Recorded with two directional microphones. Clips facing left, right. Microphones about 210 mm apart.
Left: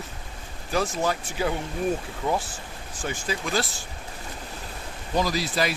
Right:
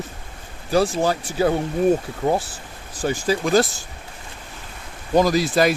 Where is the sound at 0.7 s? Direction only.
30° right (ahead or behind).